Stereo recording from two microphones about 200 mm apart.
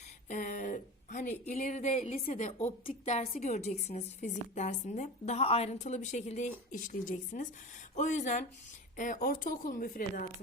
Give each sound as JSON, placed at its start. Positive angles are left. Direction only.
{"t": 0.3, "sound": "a woman's voice", "side_deg": 35}